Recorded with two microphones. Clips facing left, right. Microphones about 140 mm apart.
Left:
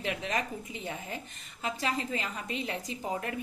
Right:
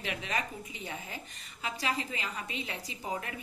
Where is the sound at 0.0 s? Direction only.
45° left (ahead or behind).